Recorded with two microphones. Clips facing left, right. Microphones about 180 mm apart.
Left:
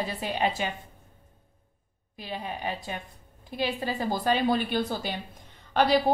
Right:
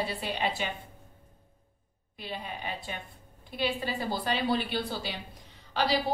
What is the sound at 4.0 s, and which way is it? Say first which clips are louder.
A woman's voice: left 7 dB; 45° left (ahead or behind).